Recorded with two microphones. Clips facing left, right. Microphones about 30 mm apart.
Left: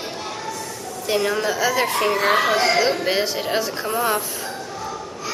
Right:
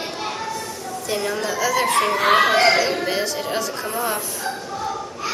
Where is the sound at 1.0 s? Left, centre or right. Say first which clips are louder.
Left 3 dB; centre.